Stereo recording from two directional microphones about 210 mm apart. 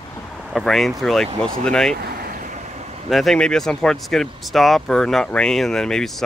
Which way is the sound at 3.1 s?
Centre (ahead or behind).